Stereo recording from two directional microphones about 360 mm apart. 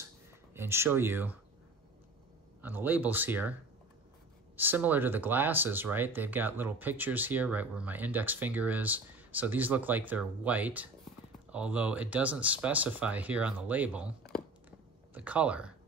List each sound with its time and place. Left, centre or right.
0.6 s speech: centre
2.6 s speech: centre
4.6 s speech: centre